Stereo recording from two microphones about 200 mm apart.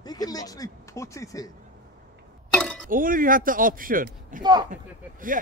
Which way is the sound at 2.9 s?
45° right (ahead or behind).